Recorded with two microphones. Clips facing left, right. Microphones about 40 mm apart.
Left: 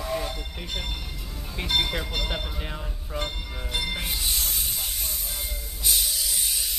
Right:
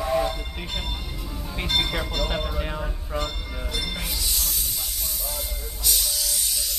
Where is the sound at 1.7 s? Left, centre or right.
Centre.